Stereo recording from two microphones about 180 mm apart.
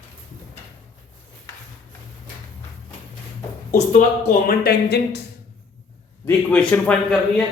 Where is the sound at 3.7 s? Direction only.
45° left (ahead or behind).